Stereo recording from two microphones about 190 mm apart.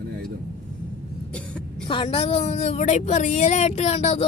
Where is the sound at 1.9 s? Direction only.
30° left (ahead or behind).